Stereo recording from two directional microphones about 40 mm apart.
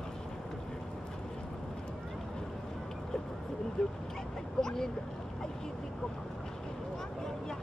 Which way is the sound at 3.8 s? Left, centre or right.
Centre.